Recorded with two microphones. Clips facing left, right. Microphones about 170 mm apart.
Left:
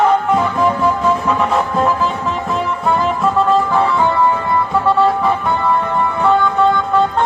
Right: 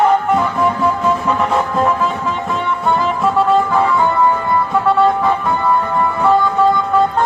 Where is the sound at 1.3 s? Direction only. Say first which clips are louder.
Even; centre (ahead or behind).